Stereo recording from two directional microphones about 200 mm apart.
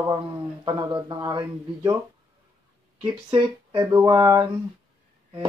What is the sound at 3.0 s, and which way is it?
Speech, 25° right (ahead or behind).